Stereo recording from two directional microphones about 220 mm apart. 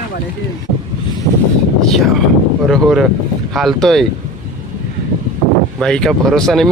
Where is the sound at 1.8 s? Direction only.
Centre (ahead or behind).